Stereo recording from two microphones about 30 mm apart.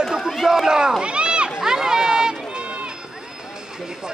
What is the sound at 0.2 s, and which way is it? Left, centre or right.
Run, centre.